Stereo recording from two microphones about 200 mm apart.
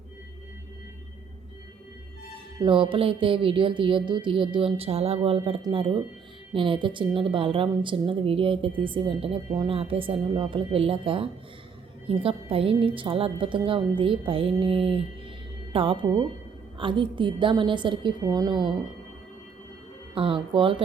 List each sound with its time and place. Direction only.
2.6 s a woman's voice: 25° right (ahead or behind)
20.1 s a woman's voice: 25° right (ahead or behind)